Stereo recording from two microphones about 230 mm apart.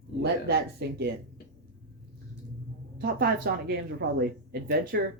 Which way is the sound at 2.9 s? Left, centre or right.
Right.